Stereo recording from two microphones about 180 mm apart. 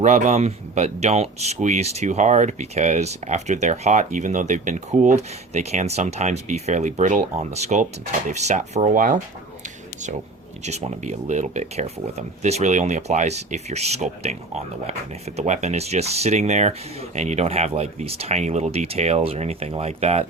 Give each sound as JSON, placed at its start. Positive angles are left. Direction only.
{"t": 0.0, "sound": "speech", "side_deg": -40}
{"t": 10.6, "sound": "speech", "side_deg": -40}